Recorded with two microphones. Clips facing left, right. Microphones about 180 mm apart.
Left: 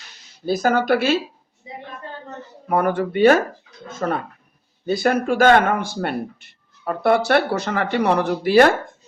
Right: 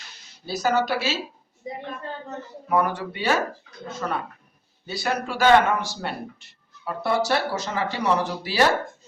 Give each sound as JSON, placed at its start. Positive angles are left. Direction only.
{"t": 0.4, "sound": "speech", "side_deg": 50}
{"t": 2.6, "sound": "speech", "side_deg": 55}